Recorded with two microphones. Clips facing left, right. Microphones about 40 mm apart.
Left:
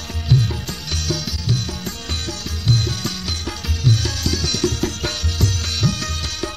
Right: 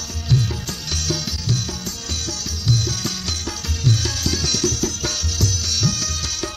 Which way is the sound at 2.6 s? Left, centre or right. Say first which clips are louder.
Left 1 dB; left.